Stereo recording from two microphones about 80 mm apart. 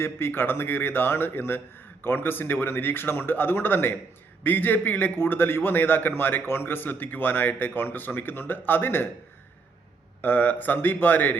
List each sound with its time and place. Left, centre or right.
0.0 s a man's voice: left
10.2 s a man's voice: left